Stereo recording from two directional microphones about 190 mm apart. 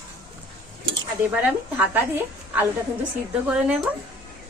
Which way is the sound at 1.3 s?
10° right (ahead or behind).